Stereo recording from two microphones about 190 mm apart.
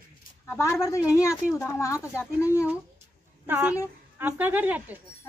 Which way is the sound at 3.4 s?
10° right (ahead or behind).